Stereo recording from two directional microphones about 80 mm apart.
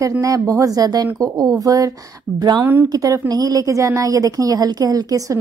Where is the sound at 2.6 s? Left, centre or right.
Right.